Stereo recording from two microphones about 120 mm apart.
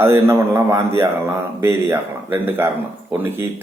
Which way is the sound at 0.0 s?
20° right (ahead or behind).